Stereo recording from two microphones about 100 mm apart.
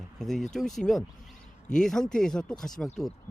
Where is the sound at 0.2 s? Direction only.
Centre (ahead or behind).